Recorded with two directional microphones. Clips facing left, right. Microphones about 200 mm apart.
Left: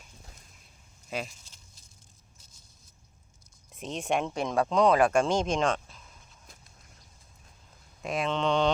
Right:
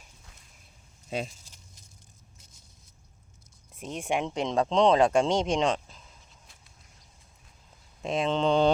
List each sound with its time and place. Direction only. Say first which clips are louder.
3.8 s speech: even; 10° right (ahead or behind)
8.0 s speech: right 3 dB; 25° right (ahead or behind)